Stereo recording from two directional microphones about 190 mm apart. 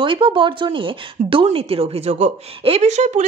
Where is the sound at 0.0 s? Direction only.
25° right (ahead or behind).